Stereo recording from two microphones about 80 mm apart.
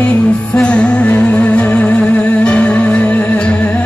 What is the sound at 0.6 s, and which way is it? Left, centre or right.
Music, centre.